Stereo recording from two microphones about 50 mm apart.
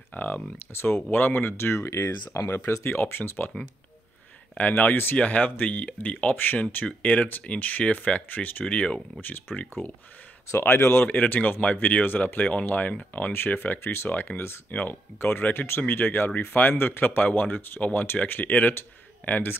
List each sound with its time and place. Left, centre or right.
0.1 s speech: left
0.6 s speech: left
1.1 s speech: left
2.8 s speech: left
4.6 s speech: left
8.6 s speech: left
9.2 s speech: left
10.8 s speech: left
11.1 s speech: left
11.6 s speech: left
15.1 s speech: left